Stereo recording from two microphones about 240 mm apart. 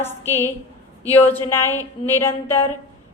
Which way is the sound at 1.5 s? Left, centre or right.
Centre.